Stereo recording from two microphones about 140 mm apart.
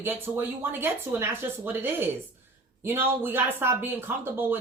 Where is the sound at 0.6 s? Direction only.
15° right (ahead or behind).